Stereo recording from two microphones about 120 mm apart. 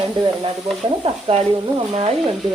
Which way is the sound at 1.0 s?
55° right (ahead or behind).